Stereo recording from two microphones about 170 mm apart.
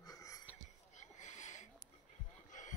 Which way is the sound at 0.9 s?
45° left (ahead or behind).